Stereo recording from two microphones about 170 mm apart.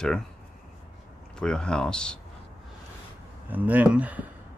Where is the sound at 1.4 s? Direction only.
5° left (ahead or behind).